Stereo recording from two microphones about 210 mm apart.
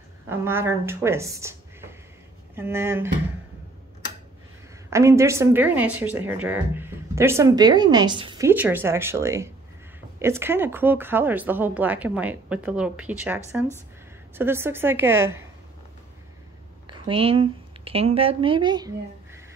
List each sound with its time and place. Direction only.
0.3 s speech: 10° right (ahead or behind)
4.8 s speech: 15° right (ahead or behind)
8.5 s speech: 10° right (ahead or behind)
16.8 s a woman's voice: 25° right (ahead or behind)